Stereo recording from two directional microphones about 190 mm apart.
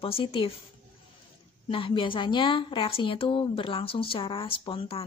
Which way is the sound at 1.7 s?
25° left (ahead or behind).